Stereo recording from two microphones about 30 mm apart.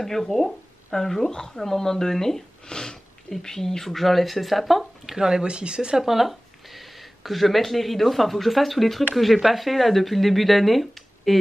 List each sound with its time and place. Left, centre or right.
0.0 s speech: centre
5.2 s speech: right
6.0 s speech: centre